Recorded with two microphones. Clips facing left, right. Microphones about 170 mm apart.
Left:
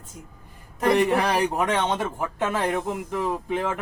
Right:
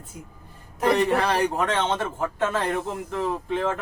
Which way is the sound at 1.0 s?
15° left (ahead or behind).